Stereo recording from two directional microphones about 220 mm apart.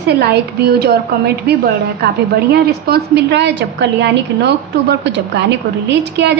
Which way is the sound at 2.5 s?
45° right (ahead or behind).